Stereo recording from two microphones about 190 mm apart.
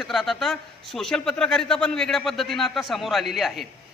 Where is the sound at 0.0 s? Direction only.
Centre (ahead or behind).